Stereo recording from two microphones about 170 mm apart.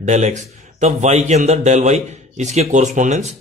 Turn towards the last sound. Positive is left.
turn(degrees=-45)  # may be behind; listen again after turning